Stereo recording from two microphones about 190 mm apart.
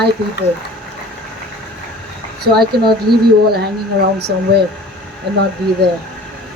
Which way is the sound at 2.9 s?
55° right (ahead or behind).